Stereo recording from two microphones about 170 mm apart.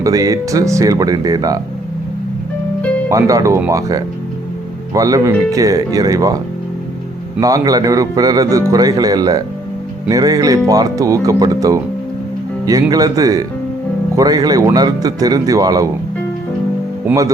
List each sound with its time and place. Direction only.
0.0 s a man's voice: 20° right (ahead or behind)
3.1 s a man's voice: 20° right (ahead or behind)
12.9 s a man's voice: 20° right (ahead or behind)